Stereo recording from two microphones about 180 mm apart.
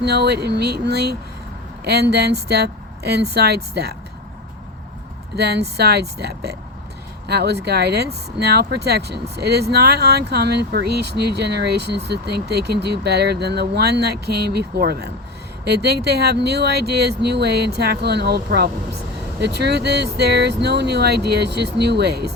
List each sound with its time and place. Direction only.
0.0 s speech: 65° right (ahead or behind)
5.4 s speech: 65° right (ahead or behind)